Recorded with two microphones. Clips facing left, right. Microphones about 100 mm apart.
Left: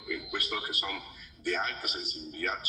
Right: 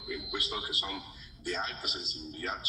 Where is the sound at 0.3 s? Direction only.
25° right (ahead or behind).